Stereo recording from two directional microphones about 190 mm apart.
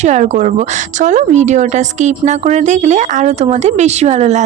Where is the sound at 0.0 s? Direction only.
40° right (ahead or behind).